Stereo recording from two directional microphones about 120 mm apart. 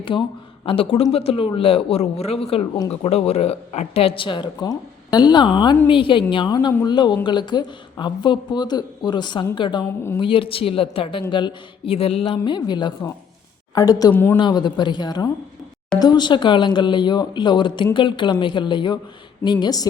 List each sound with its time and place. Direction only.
0.0 s speech: 45° left (ahead or behind)
12.5 s speech: 40° left (ahead or behind)
14.1 s speech: 20° left (ahead or behind)
14.3 s speech: 40° left (ahead or behind)